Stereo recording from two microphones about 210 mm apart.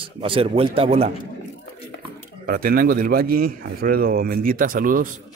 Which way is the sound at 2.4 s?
45° right (ahead or behind).